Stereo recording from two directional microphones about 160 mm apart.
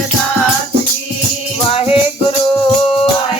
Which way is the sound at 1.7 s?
35° left (ahead or behind).